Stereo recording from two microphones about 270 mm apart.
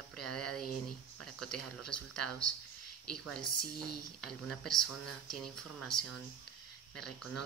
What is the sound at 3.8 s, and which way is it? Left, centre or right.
Speech, left.